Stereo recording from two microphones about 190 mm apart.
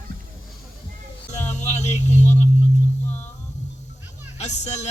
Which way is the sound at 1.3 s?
35° left (ahead or behind).